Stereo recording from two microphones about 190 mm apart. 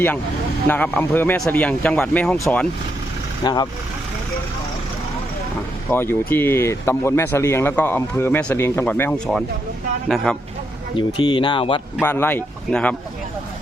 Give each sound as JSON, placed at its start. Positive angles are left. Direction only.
{"t": 0.7, "sound": "speech", "side_deg": 10}
{"t": 3.4, "sound": "speech", "side_deg": 20}
{"t": 5.9, "sound": "speech", "side_deg": 10}
{"t": 10.9, "sound": "speech", "side_deg": 25}
{"t": 12.0, "sound": "speech", "side_deg": 10}